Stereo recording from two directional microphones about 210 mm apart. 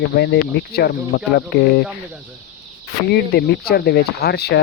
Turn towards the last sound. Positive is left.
turn(degrees=50)  # may be behind; listen again after turning